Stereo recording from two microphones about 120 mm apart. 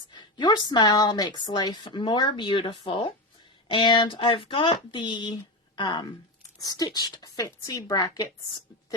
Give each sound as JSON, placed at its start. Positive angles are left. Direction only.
{"t": 0.1, "sound": "speech", "side_deg": 40}